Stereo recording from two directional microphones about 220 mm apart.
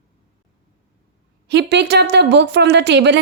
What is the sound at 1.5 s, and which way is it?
A woman's voice, 50° right (ahead or behind).